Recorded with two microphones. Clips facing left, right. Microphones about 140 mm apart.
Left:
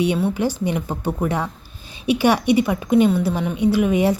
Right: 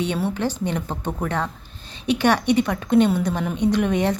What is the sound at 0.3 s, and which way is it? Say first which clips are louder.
A woman's voice: left 3 dB; 10° left (ahead or behind).